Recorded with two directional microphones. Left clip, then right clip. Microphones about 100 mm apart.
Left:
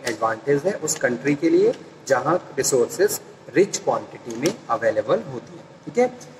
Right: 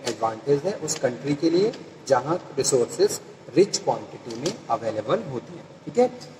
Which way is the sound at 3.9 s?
5° left (ahead or behind).